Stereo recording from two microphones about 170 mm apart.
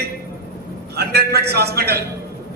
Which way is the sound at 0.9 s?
70° right (ahead or behind).